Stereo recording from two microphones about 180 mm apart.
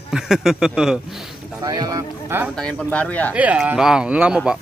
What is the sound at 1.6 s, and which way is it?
Speech, 20° right (ahead or behind).